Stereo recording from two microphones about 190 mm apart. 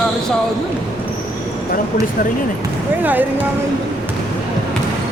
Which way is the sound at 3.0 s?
10° right (ahead or behind).